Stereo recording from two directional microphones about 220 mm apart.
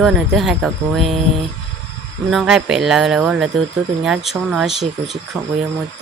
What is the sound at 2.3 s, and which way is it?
Speech, centre (ahead or behind).